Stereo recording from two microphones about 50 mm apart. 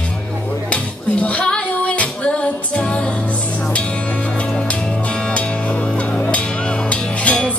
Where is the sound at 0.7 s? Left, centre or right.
Left.